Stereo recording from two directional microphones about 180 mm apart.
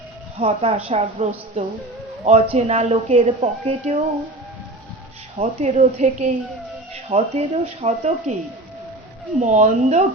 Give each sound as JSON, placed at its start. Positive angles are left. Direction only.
{"t": 0.3, "sound": "a woman's voice", "side_deg": -35}
{"t": 5.4, "sound": "a woman's voice", "side_deg": -40}
{"t": 9.4, "sound": "a woman's voice", "side_deg": -40}